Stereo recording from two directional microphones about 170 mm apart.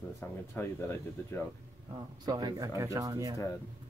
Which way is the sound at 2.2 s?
25° right (ahead or behind).